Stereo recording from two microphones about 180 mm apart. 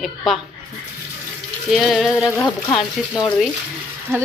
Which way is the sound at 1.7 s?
Centre (ahead or behind).